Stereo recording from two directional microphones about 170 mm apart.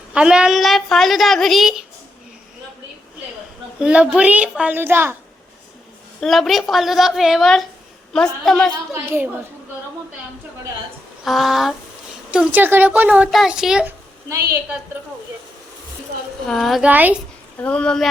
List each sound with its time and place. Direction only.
0.1 s a woman's voice: 5° right (ahead or behind)
3.8 s speech: 5° right (ahead or behind)
6.1 s a woman's voice: centre (ahead or behind)
9.0 s speech: 10° right (ahead or behind)
11.2 s a woman's voice: centre (ahead or behind)
14.3 s speech: 15° right (ahead or behind)
16.5 s a woman's voice: centre (ahead or behind)
17.6 s a woman's voice: 5° left (ahead or behind)